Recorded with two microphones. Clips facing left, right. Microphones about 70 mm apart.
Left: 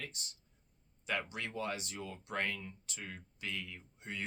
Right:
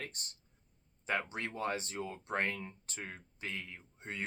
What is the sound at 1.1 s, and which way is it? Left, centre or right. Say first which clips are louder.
Speech: right 2 dB; right.